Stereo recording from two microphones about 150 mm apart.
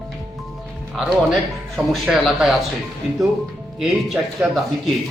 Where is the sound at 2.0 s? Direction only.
5° right (ahead or behind).